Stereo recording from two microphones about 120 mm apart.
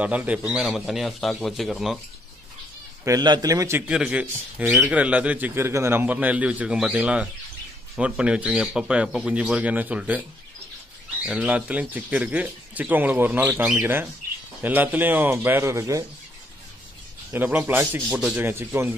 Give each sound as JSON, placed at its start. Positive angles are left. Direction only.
{"t": 0.0, "sound": "speech", "side_deg": -10}
{"t": 3.1, "sound": "a man's voice", "side_deg": -35}
{"t": 3.8, "sound": "speech", "side_deg": -10}
{"t": 11.2, "sound": "speech", "side_deg": -10}
{"t": 17.3, "sound": "speech", "side_deg": -15}